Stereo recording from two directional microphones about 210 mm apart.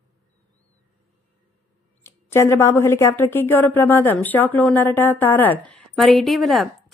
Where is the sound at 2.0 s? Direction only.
10° left (ahead or behind).